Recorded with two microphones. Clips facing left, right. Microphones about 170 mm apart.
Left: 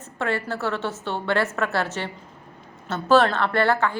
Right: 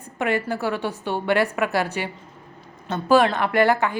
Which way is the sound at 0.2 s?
15° right (ahead or behind).